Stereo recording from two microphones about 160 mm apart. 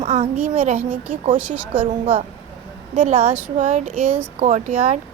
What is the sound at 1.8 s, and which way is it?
A woman's voice, 35° right (ahead or behind).